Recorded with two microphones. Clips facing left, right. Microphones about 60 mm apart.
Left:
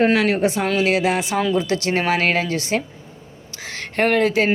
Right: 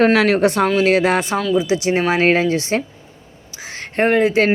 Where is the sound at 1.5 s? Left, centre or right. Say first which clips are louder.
Right 3 dB; centre.